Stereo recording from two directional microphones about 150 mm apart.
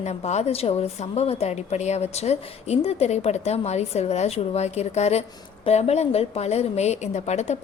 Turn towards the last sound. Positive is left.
turn(degrees=50)  # may be behind; listen again after turning